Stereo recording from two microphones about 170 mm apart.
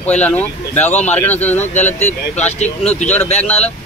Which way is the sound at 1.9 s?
45° left (ahead or behind).